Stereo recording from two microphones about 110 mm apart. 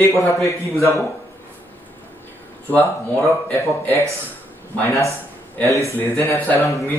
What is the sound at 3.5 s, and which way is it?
Speech, 25° left (ahead or behind).